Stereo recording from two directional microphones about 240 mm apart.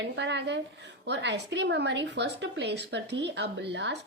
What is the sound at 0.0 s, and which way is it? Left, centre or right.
A woman's voice, right.